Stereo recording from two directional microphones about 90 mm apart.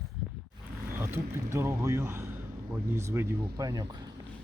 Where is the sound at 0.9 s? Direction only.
25° right (ahead or behind).